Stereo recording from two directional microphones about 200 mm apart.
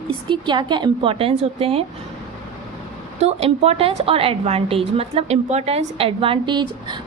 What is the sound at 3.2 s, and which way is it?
A woman's voice, 30° right (ahead or behind).